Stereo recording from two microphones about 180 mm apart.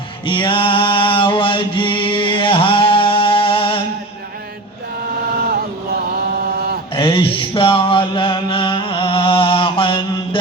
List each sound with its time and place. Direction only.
0.3 s mantra: 25° left (ahead or behind)
6.9 s mantra: 30° left (ahead or behind)